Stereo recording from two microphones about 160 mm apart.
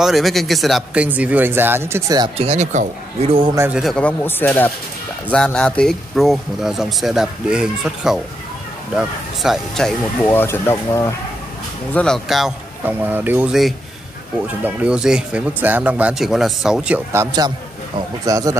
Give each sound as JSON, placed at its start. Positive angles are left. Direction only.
{"t": 0.0, "sound": "speech", "side_deg": 0}
{"t": 2.3, "sound": "speech", "side_deg": -40}
{"t": 3.5, "sound": "speech", "side_deg": -15}
{"t": 3.8, "sound": "a man's voice", "side_deg": 5}
{"t": 10.2, "sound": "speech", "side_deg": 15}
{"t": 11.9, "sound": "a man's voice", "side_deg": 5}